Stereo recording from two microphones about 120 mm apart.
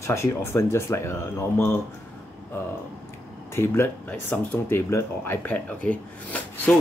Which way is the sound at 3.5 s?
20° left (ahead or behind).